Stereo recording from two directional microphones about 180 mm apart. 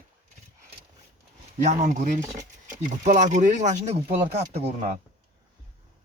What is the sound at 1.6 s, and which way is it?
Speech, 40° right (ahead or behind).